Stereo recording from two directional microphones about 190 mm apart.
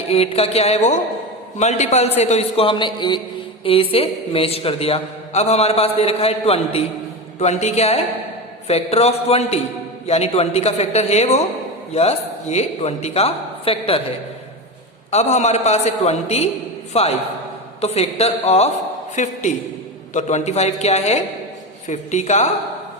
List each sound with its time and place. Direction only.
0.1 s a man's voice: 30° left (ahead or behind)
15.1 s a man's voice: 35° left (ahead or behind)